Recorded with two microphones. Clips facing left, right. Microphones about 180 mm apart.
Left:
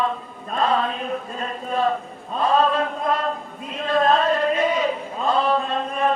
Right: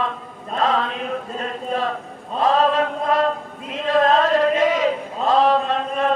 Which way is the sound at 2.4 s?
90° right.